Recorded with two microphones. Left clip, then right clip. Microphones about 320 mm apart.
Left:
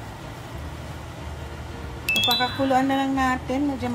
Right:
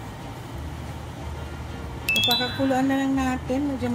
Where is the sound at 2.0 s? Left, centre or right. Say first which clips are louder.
Left 1 dB; centre.